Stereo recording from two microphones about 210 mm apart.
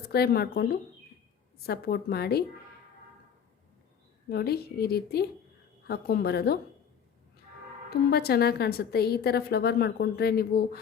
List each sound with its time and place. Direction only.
0.1 s a woman's voice: 50° left (ahead or behind)
4.3 s a woman's voice: 50° left (ahead or behind)
7.9 s a woman's voice: 50° left (ahead or behind)